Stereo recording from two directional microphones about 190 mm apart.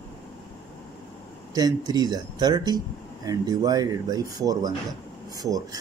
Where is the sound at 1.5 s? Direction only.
20° right (ahead or behind).